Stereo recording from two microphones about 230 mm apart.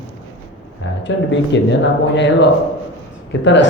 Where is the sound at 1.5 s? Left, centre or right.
Left.